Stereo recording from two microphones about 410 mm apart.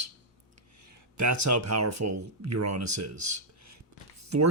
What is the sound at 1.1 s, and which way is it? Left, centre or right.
Speech, right.